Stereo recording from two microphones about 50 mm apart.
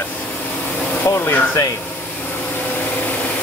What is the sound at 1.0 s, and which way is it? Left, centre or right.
Speech, left.